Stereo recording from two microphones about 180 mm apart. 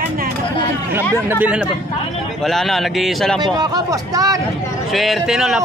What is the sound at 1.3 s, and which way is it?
A man's voice, 5° right (ahead or behind).